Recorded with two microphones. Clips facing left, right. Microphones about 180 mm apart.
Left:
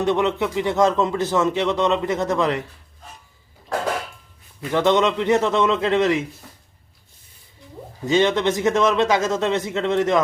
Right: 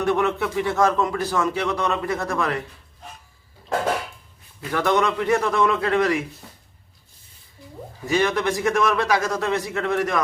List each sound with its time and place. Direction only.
0.0 s speech: 20° left (ahead or behind)
4.7 s speech: 20° left (ahead or behind)
8.0 s speech: 20° left (ahead or behind)